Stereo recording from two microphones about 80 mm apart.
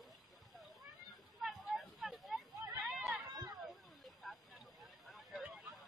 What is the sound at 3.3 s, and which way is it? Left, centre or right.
Run, right.